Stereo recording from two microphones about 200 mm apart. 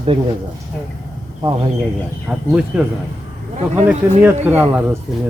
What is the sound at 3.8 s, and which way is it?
Speech, 10° right (ahead or behind).